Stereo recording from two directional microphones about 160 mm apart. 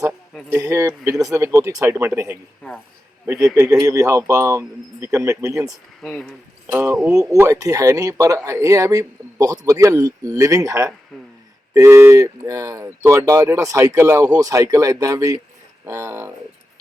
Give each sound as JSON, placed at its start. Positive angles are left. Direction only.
{"t": 0.5, "sound": "speech", "side_deg": -20}
{"t": 6.0, "sound": "speech", "side_deg": 5}
{"t": 6.7, "sound": "speech", "side_deg": -20}